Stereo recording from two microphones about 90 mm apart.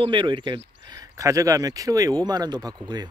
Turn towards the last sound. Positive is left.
turn(degrees=-50)  # may be behind; listen again after turning